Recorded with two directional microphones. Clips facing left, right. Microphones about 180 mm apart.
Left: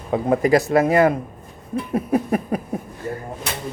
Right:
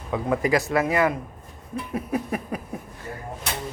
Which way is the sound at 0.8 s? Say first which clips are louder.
Left 6 dB; 45° left (ahead or behind).